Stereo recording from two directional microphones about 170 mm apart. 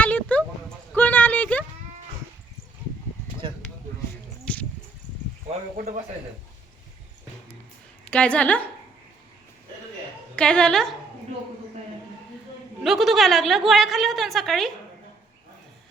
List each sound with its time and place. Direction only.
0.0 s a sound: 10° left (ahead or behind)
4.5 s a sound: 5° left (ahead or behind)
5.7 s a man's voice: 55° right (ahead or behind)
8.0 s a woman's voice: 5° left (ahead or behind)
10.3 s a woman's voice: 5° left (ahead or behind)
12.8 s a woman's voice: centre (ahead or behind)